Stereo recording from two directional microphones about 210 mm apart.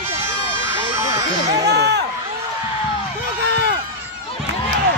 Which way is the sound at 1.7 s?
55° right (ahead or behind).